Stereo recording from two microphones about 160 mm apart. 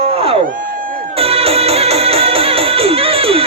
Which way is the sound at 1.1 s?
35° right (ahead or behind).